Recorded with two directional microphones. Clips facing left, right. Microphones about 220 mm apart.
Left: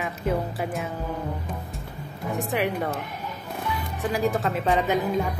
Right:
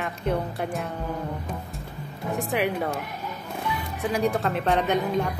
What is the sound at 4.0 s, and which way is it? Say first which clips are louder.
Speech: even; centre (ahead or behind).